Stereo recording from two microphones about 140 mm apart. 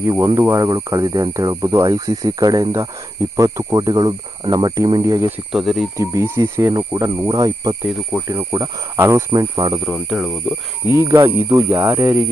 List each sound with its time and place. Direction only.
0.0 s speech: 20° right (ahead or behind)
5.5 s speech: centre (ahead or behind)
6.0 s speech: 20° right (ahead or behind)
9.8 s speech: 5° right (ahead or behind)
10.8 s speech: 20° right (ahead or behind)